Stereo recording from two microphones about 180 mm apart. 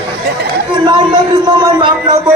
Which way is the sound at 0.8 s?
25° right (ahead or behind).